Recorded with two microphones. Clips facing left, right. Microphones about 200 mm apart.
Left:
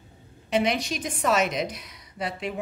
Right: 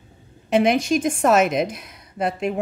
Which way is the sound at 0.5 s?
50° right (ahead or behind).